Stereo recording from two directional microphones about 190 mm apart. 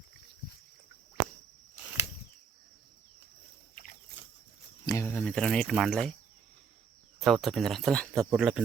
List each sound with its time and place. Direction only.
4.9 s speech: 10° left (ahead or behind)
7.2 s speech: centre (ahead or behind)